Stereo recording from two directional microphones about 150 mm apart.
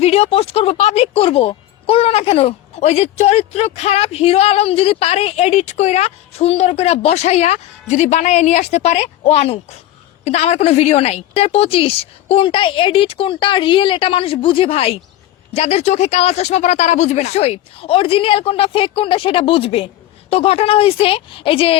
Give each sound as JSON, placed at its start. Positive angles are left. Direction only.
{"t": 0.0, "sound": "a woman's voice", "side_deg": 40}